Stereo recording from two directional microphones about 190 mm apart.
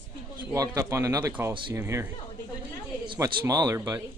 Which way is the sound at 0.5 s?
15° right (ahead or behind).